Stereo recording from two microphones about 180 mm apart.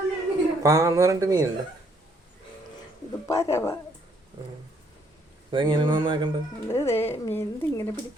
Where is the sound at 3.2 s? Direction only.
15° left (ahead or behind).